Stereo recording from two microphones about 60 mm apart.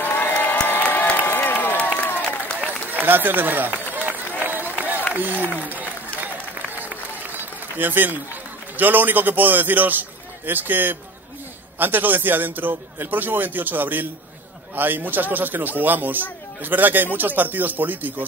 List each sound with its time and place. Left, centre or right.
0.0 s crowd: left
1.3 s a sound: left
2.0 s applause: left
2.6 s run: right
5.1 s speech: right
6.2 s a sound: right
8.7 s a man's voice: right